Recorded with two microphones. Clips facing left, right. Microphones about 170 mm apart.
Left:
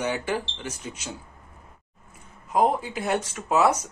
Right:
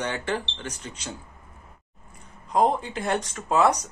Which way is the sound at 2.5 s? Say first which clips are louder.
Even; 10° left (ahead or behind).